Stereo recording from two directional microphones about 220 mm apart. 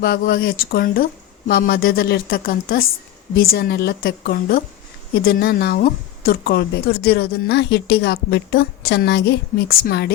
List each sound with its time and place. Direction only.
0.0 s speech: 45° left (ahead or behind)